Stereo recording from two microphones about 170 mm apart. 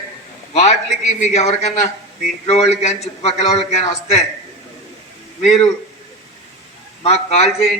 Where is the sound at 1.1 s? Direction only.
45° left (ahead or behind).